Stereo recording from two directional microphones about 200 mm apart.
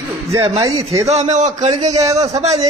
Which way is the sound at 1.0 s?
30° right (ahead or behind).